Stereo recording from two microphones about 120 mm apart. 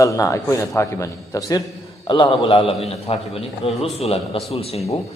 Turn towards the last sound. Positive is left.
turn(degrees=60)  # may be behind; listen again after turning